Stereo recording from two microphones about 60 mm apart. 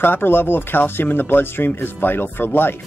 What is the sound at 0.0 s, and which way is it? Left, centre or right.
Speech, left.